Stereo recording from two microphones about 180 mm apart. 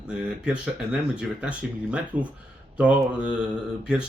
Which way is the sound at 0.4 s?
5° right (ahead or behind).